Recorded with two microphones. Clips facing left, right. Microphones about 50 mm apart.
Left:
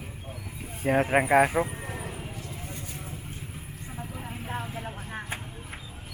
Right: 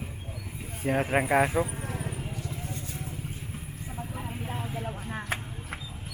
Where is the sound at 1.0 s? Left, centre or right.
Centre.